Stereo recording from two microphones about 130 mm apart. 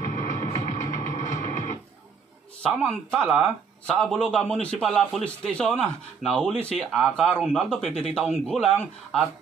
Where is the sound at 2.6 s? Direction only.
10° left (ahead or behind).